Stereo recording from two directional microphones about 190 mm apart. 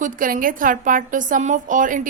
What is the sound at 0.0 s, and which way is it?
A woman's voice, 45° right (ahead or behind).